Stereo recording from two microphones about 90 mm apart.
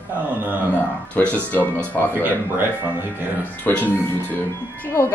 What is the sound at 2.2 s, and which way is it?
Speech, 25° right (ahead or behind).